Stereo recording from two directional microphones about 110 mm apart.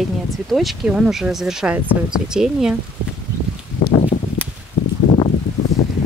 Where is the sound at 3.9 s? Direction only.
75° left (ahead or behind).